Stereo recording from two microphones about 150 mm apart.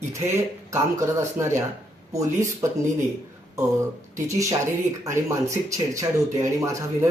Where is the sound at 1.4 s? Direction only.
15° right (ahead or behind).